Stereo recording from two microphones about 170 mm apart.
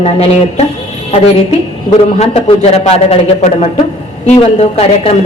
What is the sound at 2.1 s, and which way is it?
A man's voice, 40° left (ahead or behind).